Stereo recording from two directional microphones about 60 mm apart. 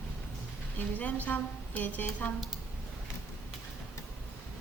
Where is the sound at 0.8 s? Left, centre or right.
Left.